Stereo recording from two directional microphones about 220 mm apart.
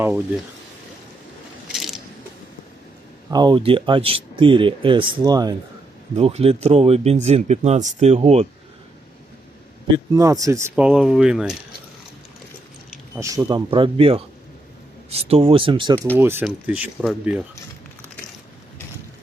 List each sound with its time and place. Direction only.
1.6 s a sound: centre (ahead or behind)
3.2 s speech: 20° right (ahead or behind)
9.9 s speech: 15° right (ahead or behind)
13.1 s speech: 15° right (ahead or behind)
16.1 s speech: 10° right (ahead or behind)